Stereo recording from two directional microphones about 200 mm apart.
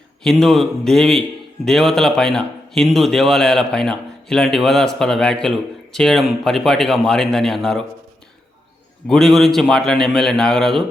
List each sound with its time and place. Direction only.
0.2 s speech: centre (ahead or behind)
9.0 s speech: centre (ahead or behind)